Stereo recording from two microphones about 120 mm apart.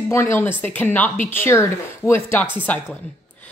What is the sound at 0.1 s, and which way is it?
A woman's voice, 20° left (ahead or behind).